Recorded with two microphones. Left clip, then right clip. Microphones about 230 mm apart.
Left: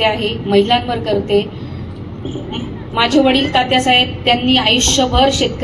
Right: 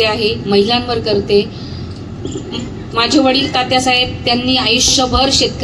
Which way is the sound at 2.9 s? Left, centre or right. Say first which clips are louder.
Right 1 dB; left.